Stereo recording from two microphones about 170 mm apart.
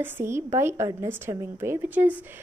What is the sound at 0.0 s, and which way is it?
A woman's voice, 15° right (ahead or behind).